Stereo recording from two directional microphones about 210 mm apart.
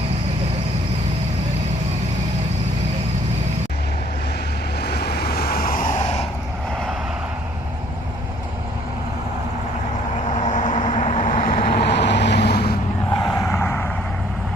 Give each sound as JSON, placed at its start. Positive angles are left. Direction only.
{"t": 4.8, "sound": "vehicle", "side_deg": 50}
{"t": 10.2, "sound": "vehicle", "side_deg": 35}
{"t": 13.3, "sound": "vehicle", "side_deg": 10}